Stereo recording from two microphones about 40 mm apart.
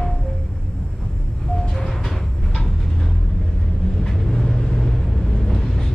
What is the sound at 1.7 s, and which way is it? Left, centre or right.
Music, centre.